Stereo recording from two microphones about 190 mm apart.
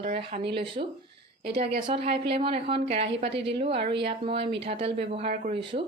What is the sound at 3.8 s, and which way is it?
Speech, 60° right (ahead or behind).